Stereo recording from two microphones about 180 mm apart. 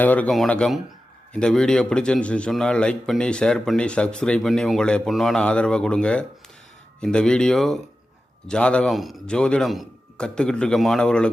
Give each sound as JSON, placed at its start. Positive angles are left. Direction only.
{"t": 0.0, "sound": "a man's voice", "side_deg": 10}